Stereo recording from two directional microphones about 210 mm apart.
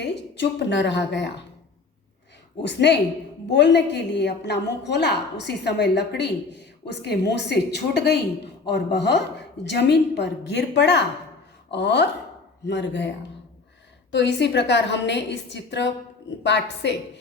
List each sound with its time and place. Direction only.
0.0 s a woman's voice: 55° left (ahead or behind)
2.6 s a woman's voice: 55° left (ahead or behind)